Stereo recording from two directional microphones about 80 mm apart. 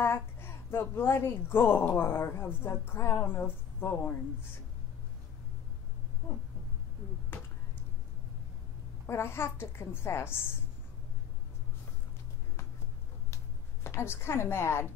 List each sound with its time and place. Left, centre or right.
0.0 s a woman's voice: left
9.0 s a woman's voice: left
13.8 s a woman's voice: left